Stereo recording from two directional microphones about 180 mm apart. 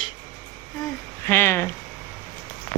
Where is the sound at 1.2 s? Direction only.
10° left (ahead or behind).